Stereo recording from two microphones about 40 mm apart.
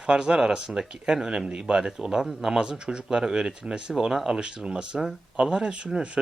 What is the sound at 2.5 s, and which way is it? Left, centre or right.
Speech, right.